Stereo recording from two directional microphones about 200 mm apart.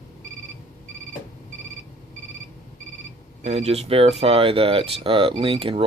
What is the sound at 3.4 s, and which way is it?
Speech, 30° right (ahead or behind).